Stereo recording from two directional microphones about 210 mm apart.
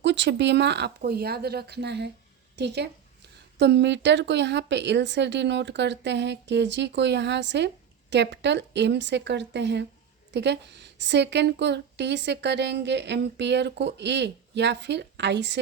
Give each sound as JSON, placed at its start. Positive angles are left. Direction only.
{"t": 0.0, "sound": "a woman's voice", "side_deg": -55}